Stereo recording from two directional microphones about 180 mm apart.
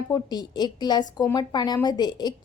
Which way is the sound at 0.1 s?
20° left (ahead or behind).